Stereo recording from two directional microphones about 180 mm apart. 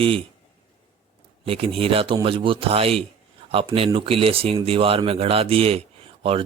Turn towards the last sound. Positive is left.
turn(degrees=-30)  # may be behind; listen again after turning